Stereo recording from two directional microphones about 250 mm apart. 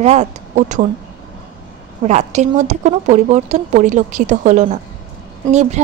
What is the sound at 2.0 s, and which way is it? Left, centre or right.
Speech, right.